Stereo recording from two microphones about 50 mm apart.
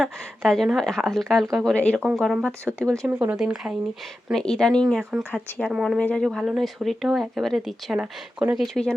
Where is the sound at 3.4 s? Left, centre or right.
Centre.